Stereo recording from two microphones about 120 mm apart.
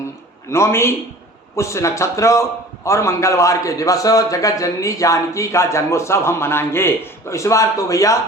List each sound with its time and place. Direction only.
0.5 s a man's voice: 20° left (ahead or behind)